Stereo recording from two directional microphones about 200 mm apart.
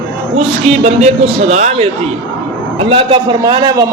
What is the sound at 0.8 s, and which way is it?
A man's voice, 35° right (ahead or behind).